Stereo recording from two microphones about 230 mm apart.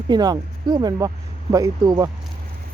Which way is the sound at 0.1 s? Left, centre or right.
Centre.